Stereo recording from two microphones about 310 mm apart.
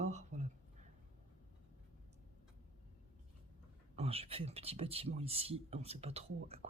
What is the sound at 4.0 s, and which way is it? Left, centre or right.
Speech, centre.